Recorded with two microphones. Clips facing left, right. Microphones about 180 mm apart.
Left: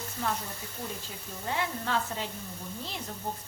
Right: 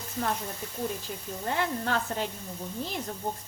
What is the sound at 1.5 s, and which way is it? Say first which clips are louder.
Sizzle: right 3 dB; 55° right (ahead or behind).